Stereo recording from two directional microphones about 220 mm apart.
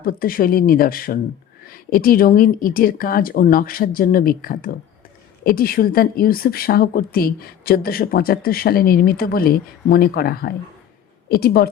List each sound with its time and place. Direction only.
0.0 s speech: 40° left (ahead or behind)